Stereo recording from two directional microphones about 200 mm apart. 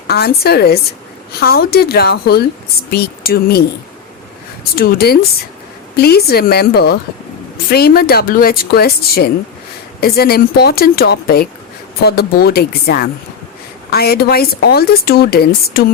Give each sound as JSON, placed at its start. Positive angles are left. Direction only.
{"t": 0.1, "sound": "speech", "side_deg": 50}
{"t": 4.8, "sound": "speech", "side_deg": 50}